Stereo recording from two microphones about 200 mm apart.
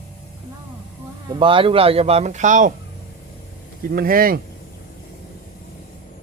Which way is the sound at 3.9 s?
45° right (ahead or behind).